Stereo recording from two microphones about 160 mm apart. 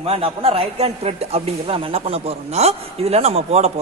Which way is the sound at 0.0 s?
35° right (ahead or behind).